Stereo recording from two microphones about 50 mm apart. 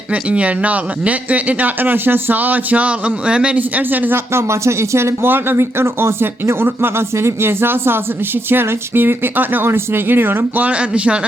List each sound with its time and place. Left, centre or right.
0.1 s speech: right
3.2 s speech: right
3.6 s speech: right
4.3 s speech: right
5.2 s speech: right
9.6 s speech: right
10.6 s speech: right